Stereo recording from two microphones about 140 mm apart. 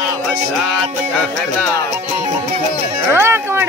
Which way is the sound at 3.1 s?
20° right (ahead or behind).